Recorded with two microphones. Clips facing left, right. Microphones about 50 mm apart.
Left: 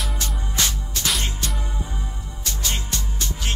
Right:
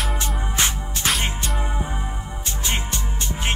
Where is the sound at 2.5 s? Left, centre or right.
Right.